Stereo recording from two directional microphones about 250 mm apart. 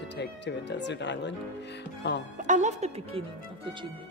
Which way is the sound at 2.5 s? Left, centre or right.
Right.